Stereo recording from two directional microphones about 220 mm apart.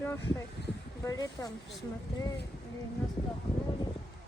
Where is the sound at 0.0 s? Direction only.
10° left (ahead or behind).